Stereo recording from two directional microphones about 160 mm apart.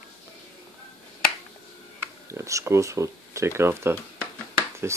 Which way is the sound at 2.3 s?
20° right (ahead or behind).